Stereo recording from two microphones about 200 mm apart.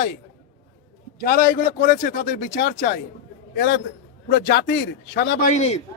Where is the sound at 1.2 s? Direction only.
45° left (ahead or behind).